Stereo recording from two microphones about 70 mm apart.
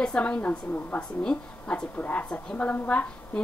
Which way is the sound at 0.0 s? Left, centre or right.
Centre.